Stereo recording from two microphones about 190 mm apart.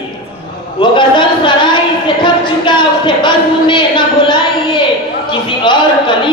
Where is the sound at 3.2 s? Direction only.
25° left (ahead or behind).